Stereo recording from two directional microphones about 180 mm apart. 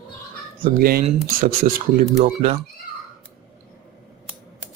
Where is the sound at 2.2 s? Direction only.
35° right (ahead or behind).